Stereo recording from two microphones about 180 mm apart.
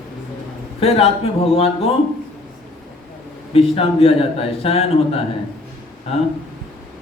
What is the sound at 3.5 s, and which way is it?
Speech, 35° left (ahead or behind).